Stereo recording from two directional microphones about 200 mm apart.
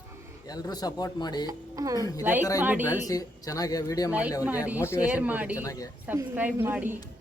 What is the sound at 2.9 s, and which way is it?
Speech, 20° left (ahead or behind).